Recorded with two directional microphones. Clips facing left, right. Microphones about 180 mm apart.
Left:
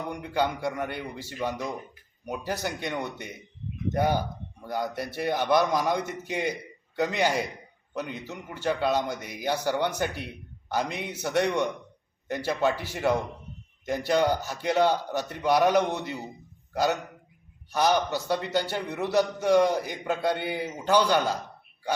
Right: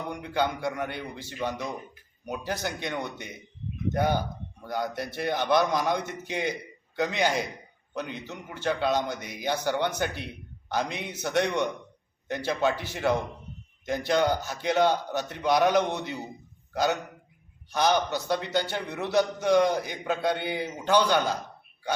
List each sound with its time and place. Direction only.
0.0 s a man's voice: 5° left (ahead or behind)